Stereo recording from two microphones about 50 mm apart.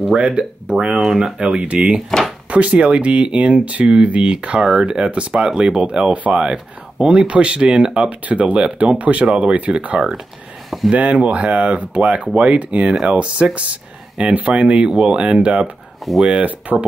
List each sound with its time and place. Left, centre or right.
0.1 s speech: centre
1.6 s speech: right
4.6 s speech: centre
4.8 s speech: centre
16.2 s speech: centre